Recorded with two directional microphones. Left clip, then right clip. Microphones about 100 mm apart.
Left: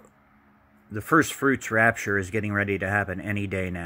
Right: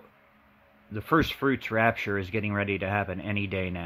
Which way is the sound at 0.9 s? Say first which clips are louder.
Left 3 dB; 10° right (ahead or behind).